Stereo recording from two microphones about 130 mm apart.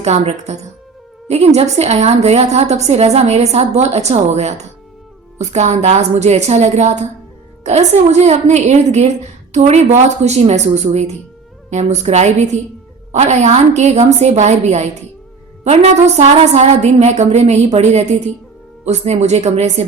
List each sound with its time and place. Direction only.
0.0 s a woman's voice: 55° right (ahead or behind)